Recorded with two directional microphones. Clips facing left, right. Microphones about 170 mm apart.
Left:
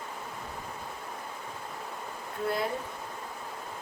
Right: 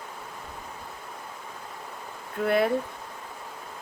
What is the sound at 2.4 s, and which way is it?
Speech, 70° right (ahead or behind).